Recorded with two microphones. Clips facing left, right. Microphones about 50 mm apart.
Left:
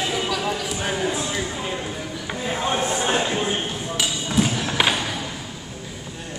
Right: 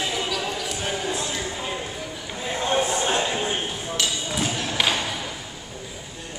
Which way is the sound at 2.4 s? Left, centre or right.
Centre.